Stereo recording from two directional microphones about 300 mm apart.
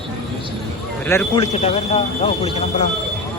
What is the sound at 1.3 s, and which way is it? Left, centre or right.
Speech, centre.